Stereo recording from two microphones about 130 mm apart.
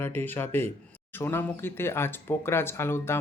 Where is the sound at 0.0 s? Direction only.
15° left (ahead or behind).